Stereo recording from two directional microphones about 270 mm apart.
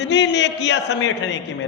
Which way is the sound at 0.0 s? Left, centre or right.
Left.